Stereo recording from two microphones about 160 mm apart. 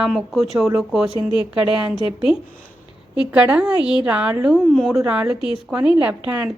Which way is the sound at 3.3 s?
10° right (ahead or behind).